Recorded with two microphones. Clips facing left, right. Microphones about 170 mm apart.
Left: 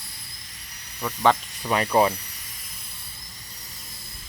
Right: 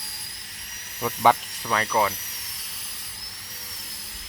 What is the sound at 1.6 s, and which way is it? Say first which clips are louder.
Speech: left 3 dB; 20° left (ahead or behind).